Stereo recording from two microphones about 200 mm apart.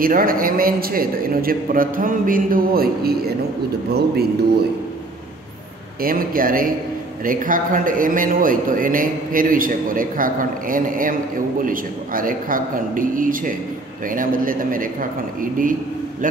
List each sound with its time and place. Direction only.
0.0 s a man's voice: 45° right (ahead or behind)
6.0 s a man's voice: 45° right (ahead or behind)